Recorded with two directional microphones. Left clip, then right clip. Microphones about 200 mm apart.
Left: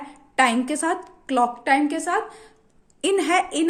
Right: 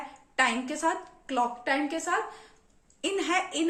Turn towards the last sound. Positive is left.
turn(degrees=45)  # may be behind; listen again after turning